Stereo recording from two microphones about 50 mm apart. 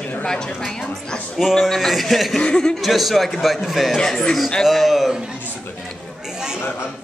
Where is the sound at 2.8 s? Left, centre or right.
Centre.